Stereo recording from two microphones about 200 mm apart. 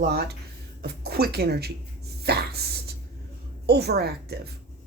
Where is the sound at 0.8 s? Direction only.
50° right (ahead or behind).